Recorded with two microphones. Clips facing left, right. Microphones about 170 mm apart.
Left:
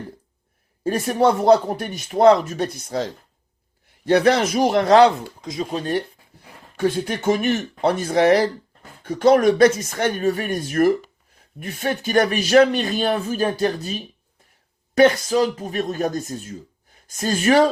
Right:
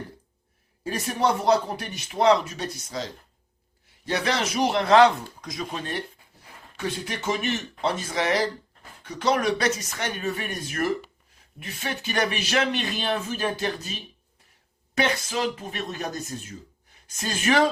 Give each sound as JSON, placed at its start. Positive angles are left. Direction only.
{"t": 0.9, "sound": "speech", "side_deg": 45}
{"t": 4.1, "sound": "speech", "side_deg": 45}
{"t": 6.7, "sound": "speech", "side_deg": 45}
{"t": 14.9, "sound": "speech", "side_deg": 40}
{"t": 17.2, "sound": "speech", "side_deg": 40}